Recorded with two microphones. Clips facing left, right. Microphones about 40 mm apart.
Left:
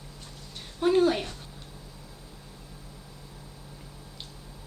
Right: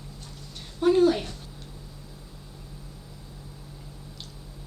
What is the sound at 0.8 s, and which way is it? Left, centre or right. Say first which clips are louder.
Speech: right 2 dB; centre.